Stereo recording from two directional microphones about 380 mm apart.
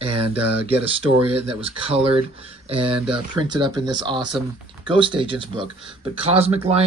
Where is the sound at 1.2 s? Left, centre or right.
Centre.